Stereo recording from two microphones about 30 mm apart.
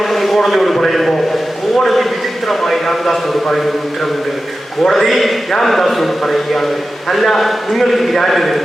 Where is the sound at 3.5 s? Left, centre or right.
Centre.